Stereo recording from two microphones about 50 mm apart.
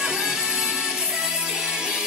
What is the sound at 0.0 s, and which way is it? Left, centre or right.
Music, centre.